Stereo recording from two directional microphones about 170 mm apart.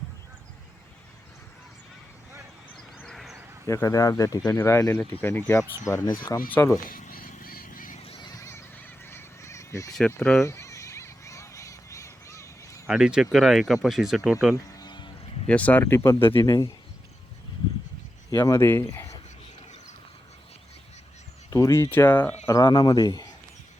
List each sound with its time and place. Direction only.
2.7 s a sound: 5° left (ahead or behind)
3.7 s speech: 20° left (ahead or behind)
6.5 s speech: 15° left (ahead or behind)
6.8 s a sound: 55° left (ahead or behind)
8.0 s neigh: 30° left (ahead or behind)
10.1 s speech: 5° left (ahead or behind)
10.4 s a sound: 15° left (ahead or behind)
12.9 s speech: 5° right (ahead or behind)
14.5 s sheep: 20° left (ahead or behind)
15.4 s speech: 10° left (ahead or behind)
18.3 s speech: 20° left (ahead or behind)
21.5 s speech: 15° left (ahead or behind)
22.4 s speech: 25° left (ahead or behind)